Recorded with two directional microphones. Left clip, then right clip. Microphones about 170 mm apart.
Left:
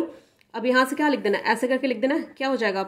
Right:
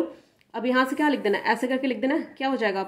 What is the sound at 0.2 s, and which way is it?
A woman's voice, 10° left (ahead or behind).